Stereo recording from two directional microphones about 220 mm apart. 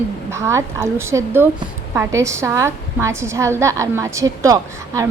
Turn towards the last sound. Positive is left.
turn(degrees=-15)  # may be behind; listen again after turning